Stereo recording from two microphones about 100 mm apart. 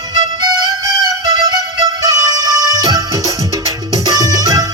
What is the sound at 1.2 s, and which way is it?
Music, 40° right (ahead or behind).